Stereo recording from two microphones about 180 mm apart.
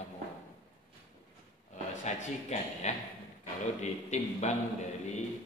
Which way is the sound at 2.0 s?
40° left (ahead or behind).